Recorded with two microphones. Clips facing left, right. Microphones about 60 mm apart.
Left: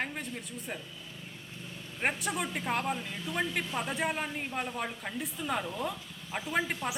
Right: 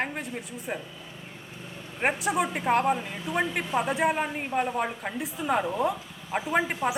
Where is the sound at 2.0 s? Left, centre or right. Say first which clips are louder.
Right 6 dB; centre.